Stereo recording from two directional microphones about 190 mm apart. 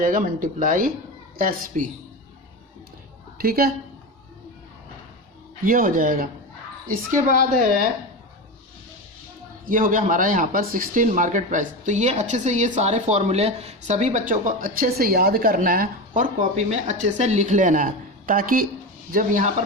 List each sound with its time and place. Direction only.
0.0 s speech: 45° right (ahead or behind)
3.4 s speech: 50° right (ahead or behind)
5.6 s speech: 45° right (ahead or behind)
9.6 s speech: 45° right (ahead or behind)